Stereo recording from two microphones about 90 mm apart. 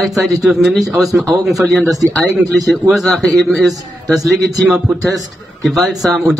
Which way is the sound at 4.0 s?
40° right (ahead or behind).